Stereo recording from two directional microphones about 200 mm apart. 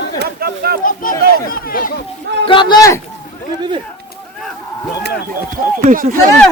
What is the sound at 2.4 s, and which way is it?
Speech, 25° left (ahead or behind).